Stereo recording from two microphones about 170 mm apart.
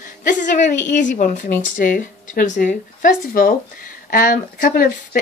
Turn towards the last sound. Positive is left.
turn(degrees=55)  # may be behind; listen again after turning